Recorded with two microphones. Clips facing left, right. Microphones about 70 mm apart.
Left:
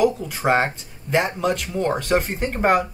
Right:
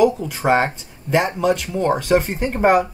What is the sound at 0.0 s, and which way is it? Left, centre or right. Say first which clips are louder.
Speech: right 3 dB; centre.